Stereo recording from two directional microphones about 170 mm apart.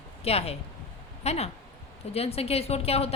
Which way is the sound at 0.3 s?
35° left (ahead or behind).